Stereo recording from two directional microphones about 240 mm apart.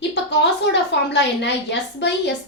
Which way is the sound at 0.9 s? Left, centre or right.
Left.